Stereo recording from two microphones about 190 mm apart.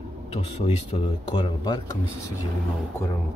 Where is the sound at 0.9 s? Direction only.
30° left (ahead or behind).